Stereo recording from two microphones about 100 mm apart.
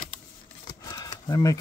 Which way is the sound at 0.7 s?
40° left (ahead or behind).